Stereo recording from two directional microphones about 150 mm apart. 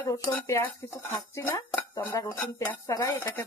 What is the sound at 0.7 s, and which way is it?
Speech, 15° left (ahead or behind).